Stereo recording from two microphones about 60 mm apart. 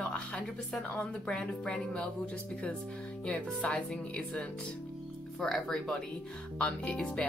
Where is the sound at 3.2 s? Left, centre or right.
Left.